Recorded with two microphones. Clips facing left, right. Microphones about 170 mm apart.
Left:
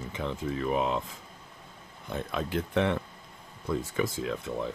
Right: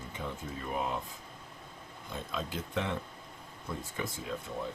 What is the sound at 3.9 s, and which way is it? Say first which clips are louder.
Speech: left 7 dB; 85° left.